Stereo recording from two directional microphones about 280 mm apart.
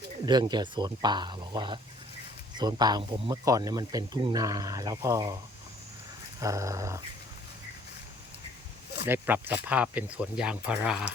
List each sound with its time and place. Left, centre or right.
0.3 s speech: centre
6.4 s speech: centre
9.0 s speech: centre